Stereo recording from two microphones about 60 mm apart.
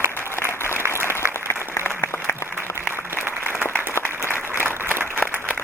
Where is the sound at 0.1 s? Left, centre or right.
Left.